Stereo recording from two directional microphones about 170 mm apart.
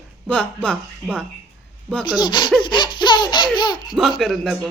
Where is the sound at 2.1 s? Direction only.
25° left (ahead or behind).